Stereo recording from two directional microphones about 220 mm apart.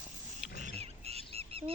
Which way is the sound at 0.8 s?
30° right (ahead or behind).